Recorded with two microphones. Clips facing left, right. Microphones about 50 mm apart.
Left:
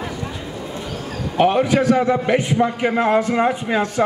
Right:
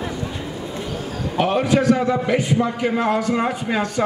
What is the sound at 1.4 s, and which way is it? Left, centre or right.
A man's voice, left.